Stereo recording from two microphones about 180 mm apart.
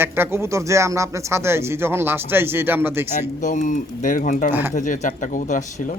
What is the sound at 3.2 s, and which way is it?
Speech, 40° left (ahead or behind).